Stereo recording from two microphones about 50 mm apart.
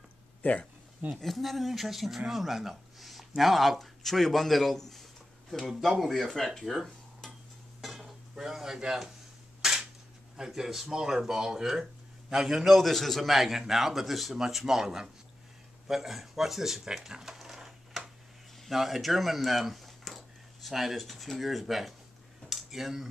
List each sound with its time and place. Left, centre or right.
0.4 s speech: left
1.1 s speech: centre
7.8 s cutlery: centre
9.6 s cap gun: centre
10.3 s speech: centre
22.5 s a sound: centre